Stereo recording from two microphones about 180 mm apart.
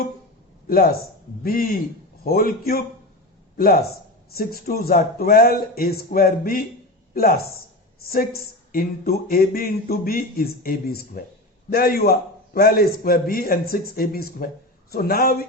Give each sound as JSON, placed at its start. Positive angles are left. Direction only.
{"t": 0.7, "sound": "speech", "side_deg": 55}
{"t": 4.4, "sound": "speech", "side_deg": 55}